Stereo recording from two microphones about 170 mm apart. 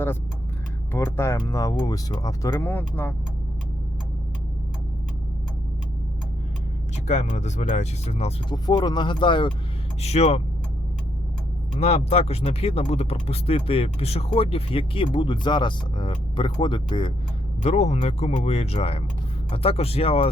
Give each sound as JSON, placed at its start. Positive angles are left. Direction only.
{"t": 0.9, "sound": "speech", "side_deg": 15}
{"t": 7.1, "sound": "speech", "side_deg": 40}
{"t": 8.4, "sound": "speech", "side_deg": 25}
{"t": 10.0, "sound": "speech", "side_deg": 40}
{"t": 11.8, "sound": "speech", "side_deg": 40}
{"t": 17.6, "sound": "speech", "side_deg": 40}